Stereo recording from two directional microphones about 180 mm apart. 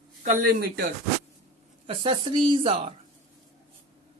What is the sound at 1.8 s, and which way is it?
Speech, 30° right (ahead or behind).